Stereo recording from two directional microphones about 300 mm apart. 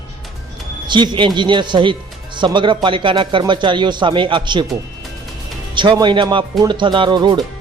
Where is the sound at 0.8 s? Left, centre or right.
Centre.